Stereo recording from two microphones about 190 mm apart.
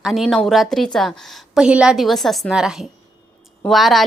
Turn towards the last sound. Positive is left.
turn(degrees=0)  # may be behind; listen again after turning